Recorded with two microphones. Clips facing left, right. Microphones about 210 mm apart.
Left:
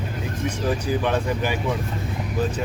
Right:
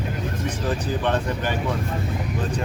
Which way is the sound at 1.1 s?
10° left (ahead or behind).